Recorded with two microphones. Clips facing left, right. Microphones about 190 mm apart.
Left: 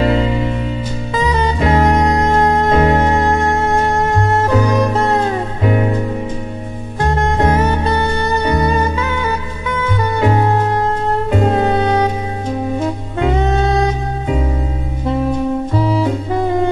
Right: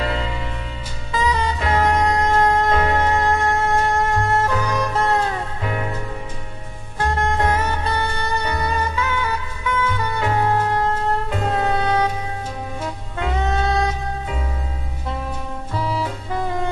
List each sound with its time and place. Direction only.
0.0 s music: 20° left (ahead or behind)
15.7 s saxophone: 20° left (ahead or behind)